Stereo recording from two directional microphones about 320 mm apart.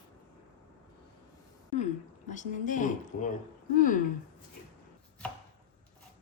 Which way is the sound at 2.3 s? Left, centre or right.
Left.